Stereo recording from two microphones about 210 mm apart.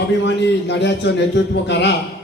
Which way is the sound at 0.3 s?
55° left (ahead or behind).